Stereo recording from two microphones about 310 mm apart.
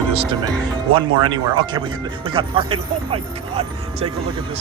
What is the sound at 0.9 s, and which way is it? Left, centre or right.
Speech, centre.